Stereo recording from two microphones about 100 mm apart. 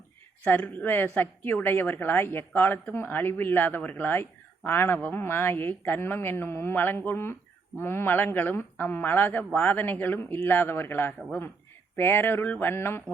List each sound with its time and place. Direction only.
0.4 s a man's voice: 15° left (ahead or behind)